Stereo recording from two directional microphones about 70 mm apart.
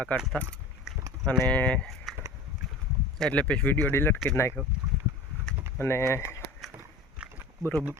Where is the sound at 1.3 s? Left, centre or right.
Left.